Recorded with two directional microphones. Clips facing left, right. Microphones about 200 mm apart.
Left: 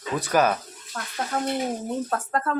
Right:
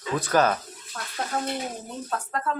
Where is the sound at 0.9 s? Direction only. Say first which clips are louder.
Left 2 dB; 45° left (ahead or behind).